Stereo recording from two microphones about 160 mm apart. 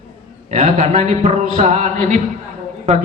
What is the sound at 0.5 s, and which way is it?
A man's voice, 50° right (ahead or behind).